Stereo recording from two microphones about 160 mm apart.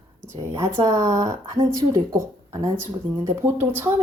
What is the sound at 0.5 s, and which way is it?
A woman's voice, 20° right (ahead or behind).